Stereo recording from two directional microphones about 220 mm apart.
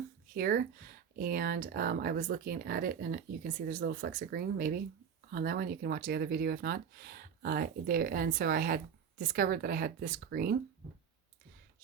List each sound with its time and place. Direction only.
0.3 s speech: 40° right (ahead or behind)